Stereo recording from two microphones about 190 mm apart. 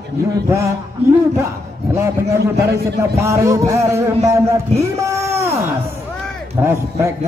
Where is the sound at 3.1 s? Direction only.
15° right (ahead or behind).